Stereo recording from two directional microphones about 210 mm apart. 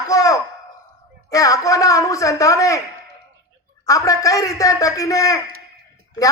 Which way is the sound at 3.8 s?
15° left (ahead or behind).